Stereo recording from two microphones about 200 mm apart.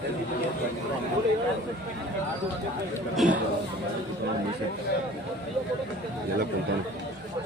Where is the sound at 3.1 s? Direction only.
5° right (ahead or behind).